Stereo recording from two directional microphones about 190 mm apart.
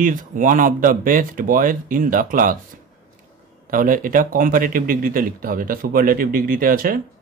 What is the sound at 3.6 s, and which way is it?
Speech, 45° right (ahead or behind).